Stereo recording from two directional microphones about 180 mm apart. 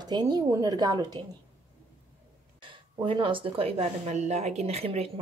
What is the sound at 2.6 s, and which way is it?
Speech, 30° right (ahead or behind).